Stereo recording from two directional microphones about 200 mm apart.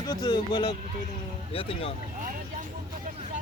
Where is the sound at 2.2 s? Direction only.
40° right (ahead or behind).